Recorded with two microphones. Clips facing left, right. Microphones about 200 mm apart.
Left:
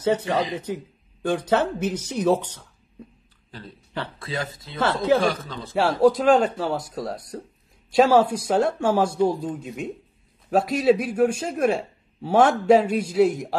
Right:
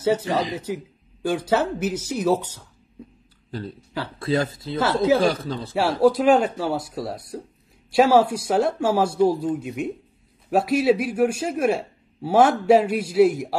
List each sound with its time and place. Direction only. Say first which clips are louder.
0.0 s speech: right 1 dB; 5° right (ahead or behind)
4.2 s speech: right 8 dB; 40° right (ahead or behind)
4.7 s speech: right 1 dB; 5° right (ahead or behind)
5.2 s speech: right 3 dB; 35° right (ahead or behind)
5.7 s speech: even; 5° right (ahead or behind)